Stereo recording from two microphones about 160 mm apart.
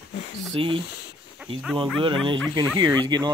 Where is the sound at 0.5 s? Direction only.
35° right (ahead or behind).